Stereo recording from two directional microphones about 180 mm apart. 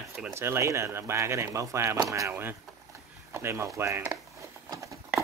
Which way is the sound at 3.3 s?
15° right (ahead or behind).